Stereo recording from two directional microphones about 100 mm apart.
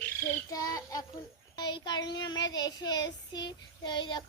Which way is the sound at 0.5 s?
35° left (ahead or behind).